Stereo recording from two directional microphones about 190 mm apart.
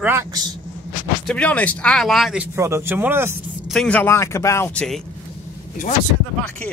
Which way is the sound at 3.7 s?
5° left (ahead or behind).